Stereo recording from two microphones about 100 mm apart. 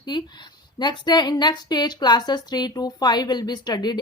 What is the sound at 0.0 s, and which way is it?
A woman's voice, 45° left (ahead or behind).